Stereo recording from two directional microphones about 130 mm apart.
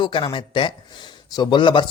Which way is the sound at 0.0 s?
40° left (ahead or behind).